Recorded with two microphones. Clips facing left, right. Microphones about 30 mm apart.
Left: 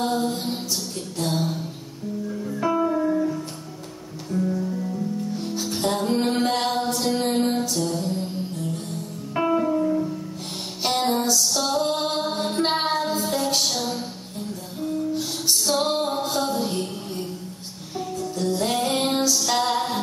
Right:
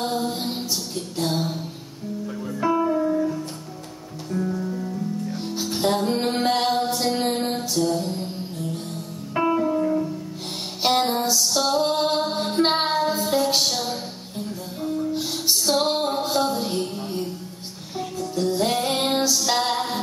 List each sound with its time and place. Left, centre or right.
0.0 s music: centre
4.3 s music: centre
5.3 s music: centre
6.9 s mantra: centre
7.3 s music: centre
9.3 s music: centre
18.3 s music: centre